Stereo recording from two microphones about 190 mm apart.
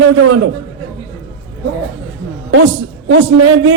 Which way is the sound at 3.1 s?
90° right.